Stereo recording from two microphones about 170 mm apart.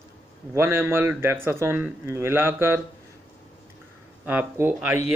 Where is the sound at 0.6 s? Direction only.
15° right (ahead or behind).